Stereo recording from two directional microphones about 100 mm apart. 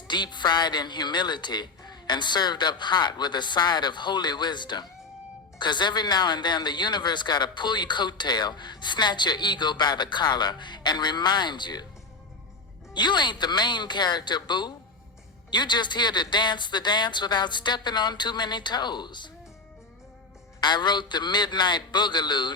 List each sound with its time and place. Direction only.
0.1 s speech: 50° left (ahead or behind)
12.9 s speech: 50° left (ahead or behind)
20.6 s speech: 50° left (ahead or behind)